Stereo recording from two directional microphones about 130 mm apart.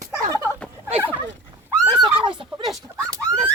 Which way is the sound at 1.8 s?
35° right (ahead or behind).